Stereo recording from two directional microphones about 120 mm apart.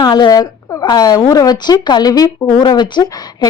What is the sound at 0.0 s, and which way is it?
Speech, 35° left (ahead or behind).